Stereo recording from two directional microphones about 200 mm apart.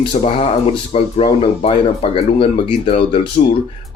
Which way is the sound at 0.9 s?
30° left (ahead or behind).